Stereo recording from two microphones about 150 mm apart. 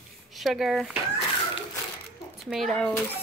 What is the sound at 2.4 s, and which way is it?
Speech, centre (ahead or behind).